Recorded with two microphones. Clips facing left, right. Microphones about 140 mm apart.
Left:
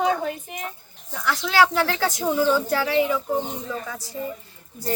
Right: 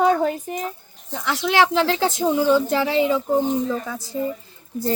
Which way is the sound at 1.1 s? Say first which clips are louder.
Right 1 dB; 20° right (ahead or behind).